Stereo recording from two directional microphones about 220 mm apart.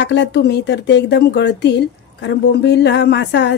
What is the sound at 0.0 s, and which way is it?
Speech, 50° left (ahead or behind).